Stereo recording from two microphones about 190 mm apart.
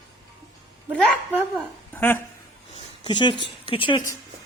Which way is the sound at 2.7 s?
25° left (ahead or behind).